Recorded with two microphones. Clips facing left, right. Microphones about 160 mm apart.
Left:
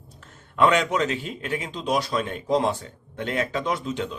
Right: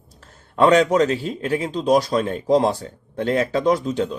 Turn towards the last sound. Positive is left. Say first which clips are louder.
# right 8 dB
turn(degrees=-40)  # may be behind; listen again after turning